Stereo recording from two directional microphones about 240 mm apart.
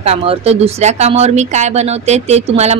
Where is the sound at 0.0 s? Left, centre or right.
Right.